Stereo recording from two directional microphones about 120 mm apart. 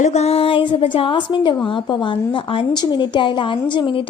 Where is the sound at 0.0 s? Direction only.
65° left (ahead or behind).